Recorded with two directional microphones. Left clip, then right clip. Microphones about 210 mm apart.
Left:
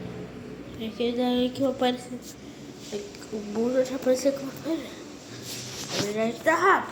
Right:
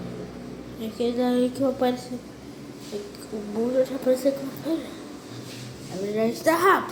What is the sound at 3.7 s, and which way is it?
A woman's voice, centre (ahead or behind).